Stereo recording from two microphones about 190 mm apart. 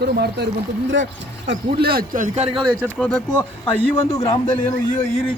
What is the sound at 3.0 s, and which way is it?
Speech, 5° left (ahead or behind).